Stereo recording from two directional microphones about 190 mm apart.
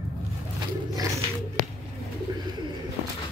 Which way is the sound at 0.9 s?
15° right (ahead or behind).